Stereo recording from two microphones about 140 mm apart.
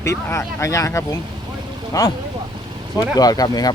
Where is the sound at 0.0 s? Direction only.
20° left (ahead or behind).